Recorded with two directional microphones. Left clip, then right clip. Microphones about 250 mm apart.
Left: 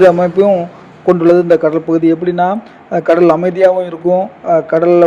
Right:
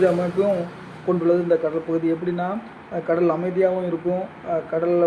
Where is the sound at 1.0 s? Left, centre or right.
Left.